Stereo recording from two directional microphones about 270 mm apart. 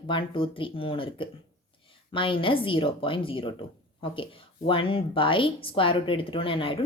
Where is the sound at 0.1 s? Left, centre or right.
Centre.